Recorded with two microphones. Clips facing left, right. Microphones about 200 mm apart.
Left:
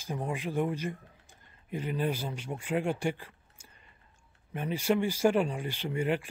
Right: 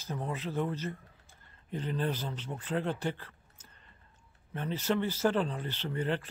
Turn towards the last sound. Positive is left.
turn(degrees=10)  # may be behind; listen again after turning